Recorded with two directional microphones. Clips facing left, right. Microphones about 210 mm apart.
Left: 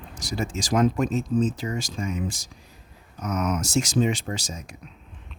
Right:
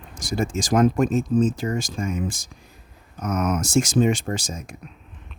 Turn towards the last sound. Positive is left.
turn(degrees=-50)  # may be behind; listen again after turning